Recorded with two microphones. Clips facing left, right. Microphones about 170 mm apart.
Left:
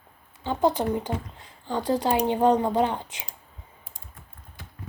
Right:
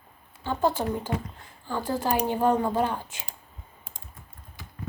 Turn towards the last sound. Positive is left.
turn(degrees=20)  # may be behind; listen again after turning